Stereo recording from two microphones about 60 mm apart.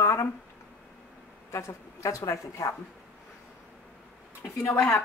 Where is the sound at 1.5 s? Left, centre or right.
Left.